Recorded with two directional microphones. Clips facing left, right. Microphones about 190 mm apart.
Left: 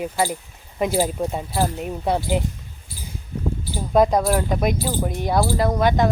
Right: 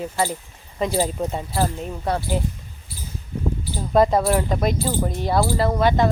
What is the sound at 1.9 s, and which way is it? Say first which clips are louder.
Speech: left 2 dB; 15° left (ahead or behind).